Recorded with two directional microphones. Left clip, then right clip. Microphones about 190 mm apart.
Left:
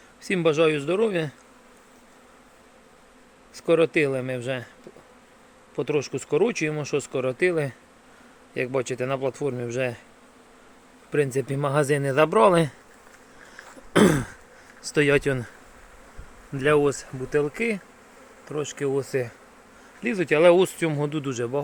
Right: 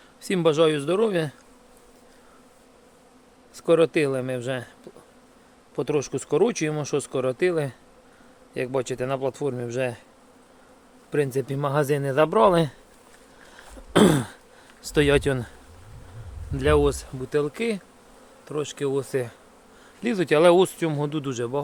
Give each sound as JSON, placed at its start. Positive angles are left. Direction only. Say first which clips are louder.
{"t": 0.2, "sound": "speech", "louder": "right 1 dB", "side_deg": -10}
{"t": 3.5, "sound": "speech", "louder": "right 1 dB", "side_deg": -5}
{"t": 5.7, "sound": "speech", "louder": "even", "side_deg": -10}
{"t": 11.1, "sound": "speech", "louder": "left 1 dB", "side_deg": 0}
{"t": 13.9, "sound": "throat clearing", "louder": "right 1 dB", "side_deg": -15}
{"t": 14.9, "sound": "speech", "louder": "even", "side_deg": -10}
{"t": 16.6, "sound": "speech", "louder": "even", "side_deg": -5}
{"t": 20.0, "sound": "speech", "louder": "even", "side_deg": -15}